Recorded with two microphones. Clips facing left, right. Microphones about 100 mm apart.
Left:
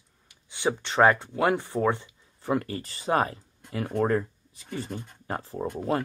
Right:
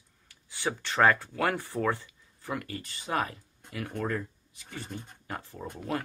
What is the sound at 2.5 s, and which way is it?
Speech, 30° left (ahead or behind).